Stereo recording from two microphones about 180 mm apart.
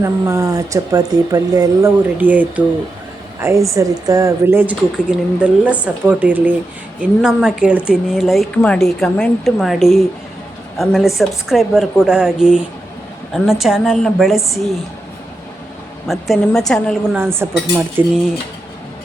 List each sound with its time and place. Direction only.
0.0 s a woman's voice: 20° right (ahead or behind); by 14.7 s centre (ahead or behind)
16.0 s a woman's voice: centre (ahead or behind)